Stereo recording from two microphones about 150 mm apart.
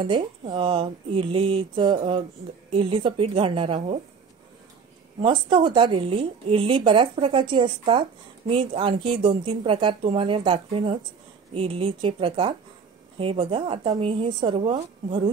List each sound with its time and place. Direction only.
0.0 s a woman's voice: 35° right (ahead or behind)
5.2 s a woman's voice: 35° right (ahead or behind)